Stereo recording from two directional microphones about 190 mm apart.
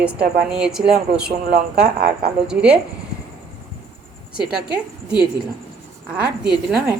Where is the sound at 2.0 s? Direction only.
55° right (ahead or behind).